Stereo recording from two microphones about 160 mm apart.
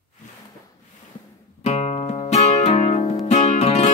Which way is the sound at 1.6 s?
40° left (ahead or behind).